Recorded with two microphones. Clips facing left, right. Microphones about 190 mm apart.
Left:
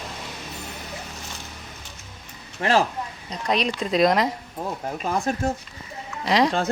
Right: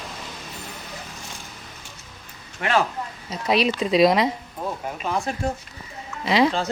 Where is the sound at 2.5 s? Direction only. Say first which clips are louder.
Left 2 dB; 30° left (ahead or behind).